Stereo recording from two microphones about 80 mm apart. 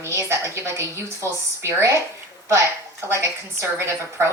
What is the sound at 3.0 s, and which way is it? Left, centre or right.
A woman's voice, right.